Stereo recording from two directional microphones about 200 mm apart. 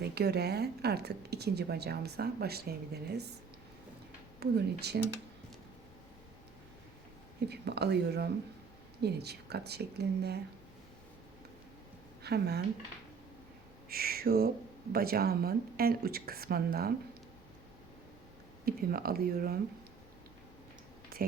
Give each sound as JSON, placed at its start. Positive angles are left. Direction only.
{"t": 0.0, "sound": "a woman's voice", "side_deg": -55}
{"t": 4.4, "sound": "speech", "side_deg": -55}
{"t": 7.5, "sound": "speech", "side_deg": -55}
{"t": 12.2, "sound": "a woman's voice", "side_deg": -55}
{"t": 13.9, "sound": "a woman's voice", "side_deg": -50}
{"t": 18.6, "sound": "a woman's voice", "side_deg": -50}
{"t": 21.1, "sound": "a sound", "side_deg": -50}